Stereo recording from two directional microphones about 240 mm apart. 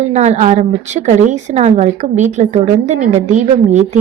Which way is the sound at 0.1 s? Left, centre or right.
Right.